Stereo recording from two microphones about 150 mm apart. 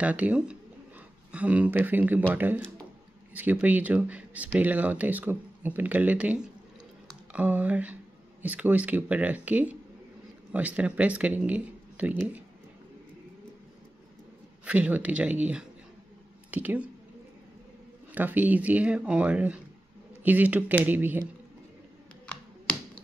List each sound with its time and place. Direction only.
0.0 s speech: 10° right (ahead or behind)
14.6 s speech: 10° right (ahead or behind)
18.1 s speech: 10° right (ahead or behind)